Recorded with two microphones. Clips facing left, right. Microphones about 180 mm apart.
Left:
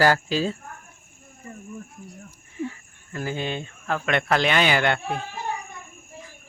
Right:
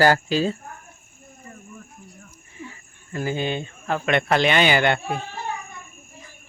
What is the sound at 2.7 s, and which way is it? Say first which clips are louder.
Speech: right 3 dB; 5° right (ahead or behind).